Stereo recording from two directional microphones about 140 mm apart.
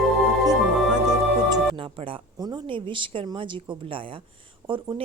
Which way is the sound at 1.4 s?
30° right (ahead or behind).